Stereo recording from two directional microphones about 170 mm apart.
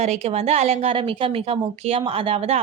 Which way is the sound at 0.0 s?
40° right (ahead or behind).